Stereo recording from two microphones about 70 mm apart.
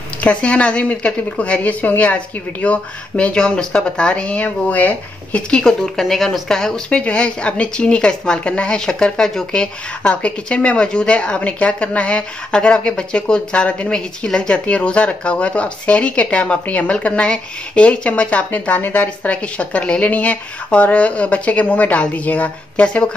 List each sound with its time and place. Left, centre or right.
0.2 s a woman's voice: centre